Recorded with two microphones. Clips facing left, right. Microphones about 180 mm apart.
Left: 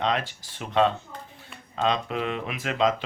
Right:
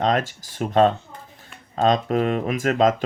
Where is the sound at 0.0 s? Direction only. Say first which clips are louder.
Right 5 dB; 45° right (ahead or behind).